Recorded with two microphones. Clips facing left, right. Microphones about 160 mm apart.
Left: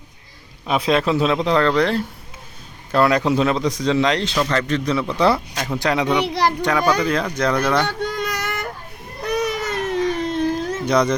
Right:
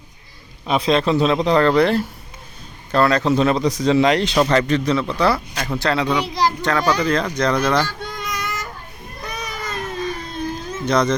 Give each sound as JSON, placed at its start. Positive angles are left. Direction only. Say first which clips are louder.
{"t": 0.7, "sound": "speech", "louder": "right 1 dB", "side_deg": 5}
{"t": 2.9, "sound": "speech", "louder": "even", "side_deg": 10}
{"t": 3.4, "sound": "speech", "louder": "right 2 dB", "side_deg": 0}
{"t": 5.0, "sound": "speech", "louder": "left 1 dB", "side_deg": 20}
{"t": 5.5, "sound": "speech", "louder": "even", "side_deg": 10}
{"t": 6.2, "sound": "a child's voice", "louder": "left 1 dB", "side_deg": 65}
{"t": 6.6, "sound": "speech", "louder": "left 1 dB", "side_deg": 10}
{"t": 7.9, "sound": "a sound", "louder": "left 6 dB", "side_deg": 70}
{"t": 9.2, "sound": "baby cry", "louder": "left 8 dB", "side_deg": 70}
{"t": 10.8, "sound": "speech", "louder": "even", "side_deg": 10}